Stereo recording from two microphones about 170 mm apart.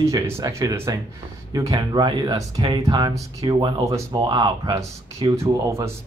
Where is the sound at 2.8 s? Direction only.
20° right (ahead or behind).